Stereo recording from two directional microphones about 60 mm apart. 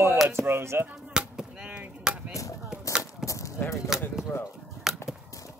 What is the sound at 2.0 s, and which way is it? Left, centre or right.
Chop, centre.